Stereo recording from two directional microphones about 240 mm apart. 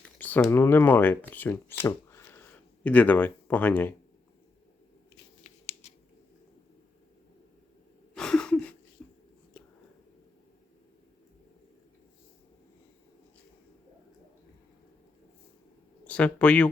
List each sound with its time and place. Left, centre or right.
0.0 s speech: centre
5.1 s scissors: left
8.1 s a sound: centre
9.0 s whispering: centre
16.0 s speech: centre